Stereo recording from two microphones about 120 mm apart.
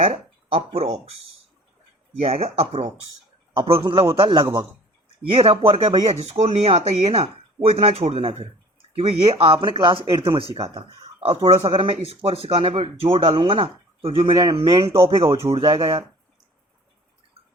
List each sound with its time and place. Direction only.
0.5 s speech: 55° right (ahead or behind)
3.5 s speech: 50° right (ahead or behind)
6.2 s speech: 60° right (ahead or behind)